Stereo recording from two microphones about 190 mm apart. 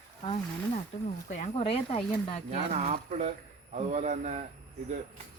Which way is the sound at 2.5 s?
40° right (ahead or behind).